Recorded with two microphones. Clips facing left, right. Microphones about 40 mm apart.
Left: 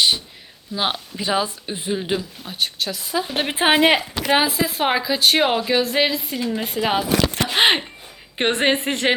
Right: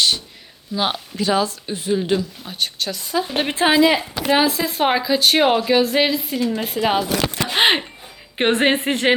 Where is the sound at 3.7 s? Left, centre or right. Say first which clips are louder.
Right 1 dB; left.